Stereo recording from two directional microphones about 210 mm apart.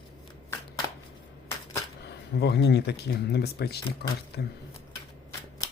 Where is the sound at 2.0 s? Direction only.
50° left (ahead or behind).